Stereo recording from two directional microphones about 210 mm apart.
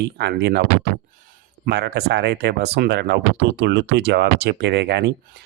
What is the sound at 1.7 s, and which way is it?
Speech, 50° right (ahead or behind).